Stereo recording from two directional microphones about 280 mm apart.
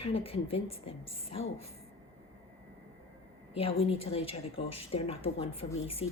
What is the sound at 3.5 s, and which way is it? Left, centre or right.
A woman's voice, centre.